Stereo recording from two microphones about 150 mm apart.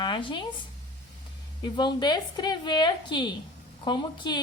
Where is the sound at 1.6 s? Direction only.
30° left (ahead or behind).